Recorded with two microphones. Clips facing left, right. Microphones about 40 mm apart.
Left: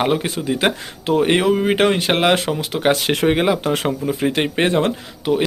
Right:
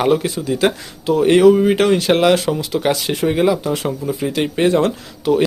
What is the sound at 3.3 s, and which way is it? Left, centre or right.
Speech, left.